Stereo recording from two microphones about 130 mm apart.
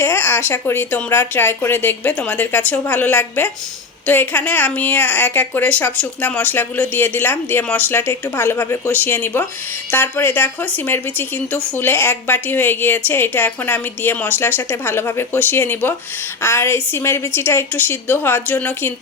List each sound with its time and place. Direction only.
0.0 s speech: 15° left (ahead or behind)